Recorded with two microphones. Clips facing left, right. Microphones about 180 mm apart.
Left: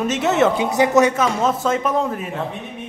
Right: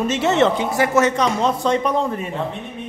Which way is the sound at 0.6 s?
20° left (ahead or behind).